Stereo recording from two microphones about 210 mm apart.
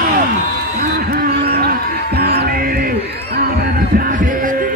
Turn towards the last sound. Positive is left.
turn(degrees=-40)  # may be behind; listen again after turning